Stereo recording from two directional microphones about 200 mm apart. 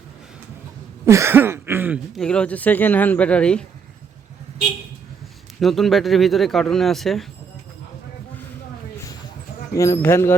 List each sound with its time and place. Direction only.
1.0 s a sound: 15° right (ahead or behind)
2.2 s speech: 5° left (ahead or behind)
5.5 s speech: centre (ahead or behind)
9.7 s speech: 15° left (ahead or behind)